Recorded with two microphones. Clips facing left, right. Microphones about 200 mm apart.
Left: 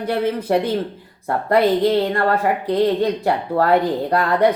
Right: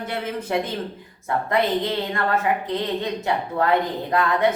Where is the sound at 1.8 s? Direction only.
40° left (ahead or behind).